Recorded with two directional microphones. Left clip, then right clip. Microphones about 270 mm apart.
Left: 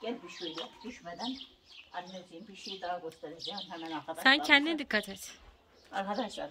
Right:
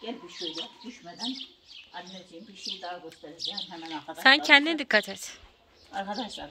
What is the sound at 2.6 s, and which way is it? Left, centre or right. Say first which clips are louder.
Speech: right 1 dB; centre.